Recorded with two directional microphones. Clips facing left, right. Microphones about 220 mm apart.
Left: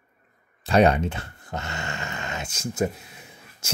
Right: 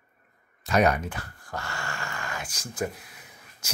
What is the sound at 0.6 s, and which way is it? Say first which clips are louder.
Speech: left 4 dB; 30° left (ahead or behind).